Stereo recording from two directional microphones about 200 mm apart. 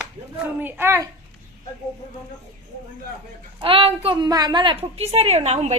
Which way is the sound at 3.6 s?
25° right (ahead or behind).